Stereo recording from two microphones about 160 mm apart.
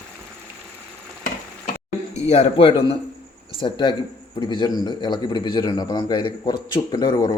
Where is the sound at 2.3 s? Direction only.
35° left (ahead or behind).